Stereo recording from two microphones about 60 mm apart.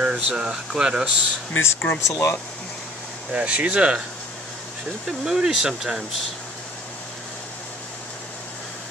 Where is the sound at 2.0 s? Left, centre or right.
Left.